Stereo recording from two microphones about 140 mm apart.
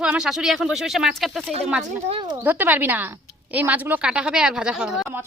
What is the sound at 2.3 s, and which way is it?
A woman's voice, 15° right (ahead or behind).